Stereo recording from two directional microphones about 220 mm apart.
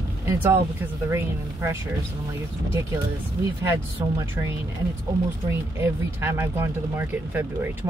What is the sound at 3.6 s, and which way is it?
Speech, 10° right (ahead or behind).